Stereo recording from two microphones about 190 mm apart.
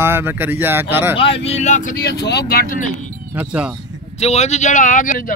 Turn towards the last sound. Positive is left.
turn(degrees=45)  # may be behind; listen again after turning